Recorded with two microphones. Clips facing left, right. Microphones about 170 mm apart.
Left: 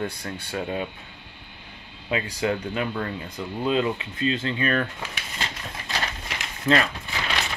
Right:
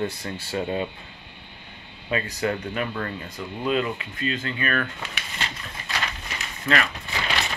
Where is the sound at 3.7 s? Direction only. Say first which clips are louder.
Left 1 dB; 25° left (ahead or behind).